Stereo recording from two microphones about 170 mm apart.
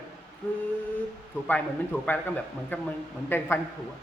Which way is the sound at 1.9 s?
10° left (ahead or behind).